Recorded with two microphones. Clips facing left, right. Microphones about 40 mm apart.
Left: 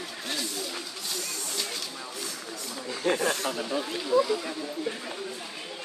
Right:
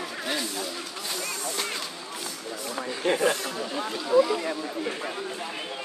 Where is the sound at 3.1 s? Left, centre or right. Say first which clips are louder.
Right 2 dB; centre.